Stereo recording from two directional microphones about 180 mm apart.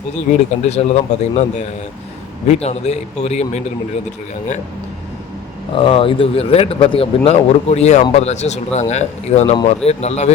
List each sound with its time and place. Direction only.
0.3 s speech: 35° left (ahead or behind)
5.7 s speech: 30° left (ahead or behind)